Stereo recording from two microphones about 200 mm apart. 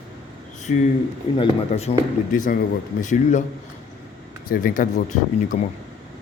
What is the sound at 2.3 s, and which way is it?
A man's voice, 40° left (ahead or behind).